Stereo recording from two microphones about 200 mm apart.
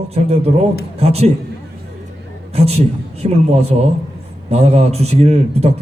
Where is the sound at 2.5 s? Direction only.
30° right (ahead or behind).